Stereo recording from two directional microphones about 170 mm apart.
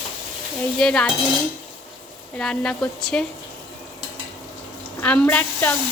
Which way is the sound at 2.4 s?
5° left (ahead or behind).